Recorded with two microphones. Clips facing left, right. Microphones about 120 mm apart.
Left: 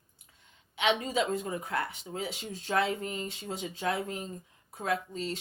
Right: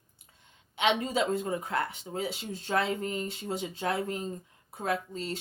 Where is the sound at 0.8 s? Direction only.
35° right (ahead or behind).